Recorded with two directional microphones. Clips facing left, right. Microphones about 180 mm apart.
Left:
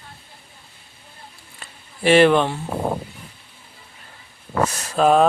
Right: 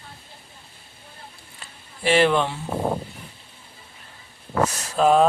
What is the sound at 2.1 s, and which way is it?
Speech, 60° left (ahead or behind).